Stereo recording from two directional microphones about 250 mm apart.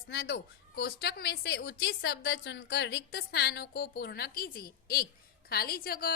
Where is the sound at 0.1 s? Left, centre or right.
Left.